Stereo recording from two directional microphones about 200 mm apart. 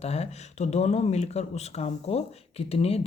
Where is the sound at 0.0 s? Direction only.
30° left (ahead or behind).